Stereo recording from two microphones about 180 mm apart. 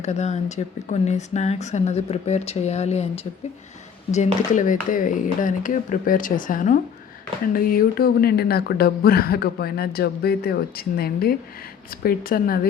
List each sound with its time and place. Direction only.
0.0 s speech: 40° left (ahead or behind)
4.1 s speech: 40° left (ahead or behind)